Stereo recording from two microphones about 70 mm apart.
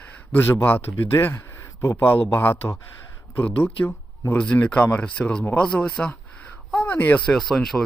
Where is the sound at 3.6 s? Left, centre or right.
Left.